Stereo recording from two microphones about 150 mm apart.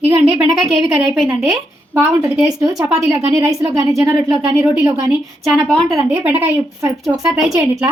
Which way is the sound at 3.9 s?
Centre (ahead or behind).